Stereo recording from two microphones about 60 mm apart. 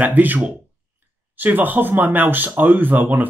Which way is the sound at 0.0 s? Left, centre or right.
Right.